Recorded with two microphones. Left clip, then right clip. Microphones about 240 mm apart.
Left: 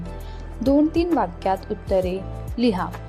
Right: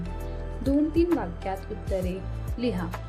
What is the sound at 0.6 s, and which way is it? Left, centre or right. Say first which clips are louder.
Speech: left 5 dB; centre.